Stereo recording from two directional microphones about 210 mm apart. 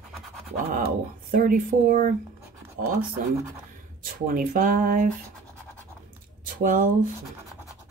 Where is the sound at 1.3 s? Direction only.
40° right (ahead or behind).